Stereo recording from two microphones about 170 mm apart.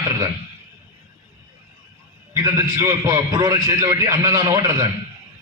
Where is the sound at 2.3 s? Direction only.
20° right (ahead or behind).